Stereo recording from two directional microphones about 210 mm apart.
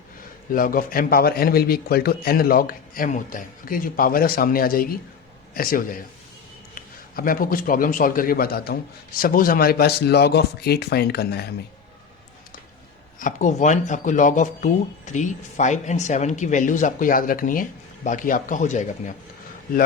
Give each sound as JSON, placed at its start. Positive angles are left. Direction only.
{"t": 0.5, "sound": "a man's voice", "side_deg": 40}
{"t": 13.1, "sound": "speech", "side_deg": 35}